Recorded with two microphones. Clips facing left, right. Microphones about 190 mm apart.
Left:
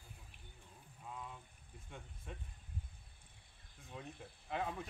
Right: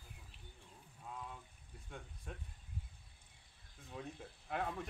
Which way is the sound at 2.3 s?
Centre (ahead or behind).